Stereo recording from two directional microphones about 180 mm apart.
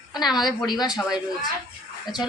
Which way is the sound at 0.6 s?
25° left (ahead or behind).